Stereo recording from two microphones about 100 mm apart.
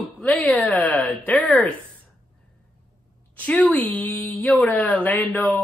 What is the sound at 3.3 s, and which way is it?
A woman's voice, 10° left (ahead or behind).